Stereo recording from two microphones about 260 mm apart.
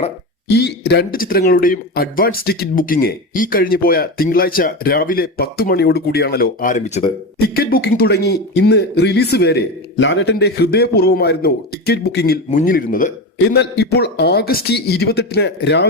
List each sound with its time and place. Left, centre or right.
0.4 s speech: left